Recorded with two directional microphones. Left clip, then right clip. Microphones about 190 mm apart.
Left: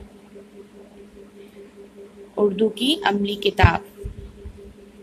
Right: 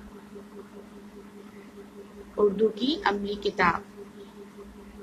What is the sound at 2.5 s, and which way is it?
A woman's voice, 15° left (ahead or behind).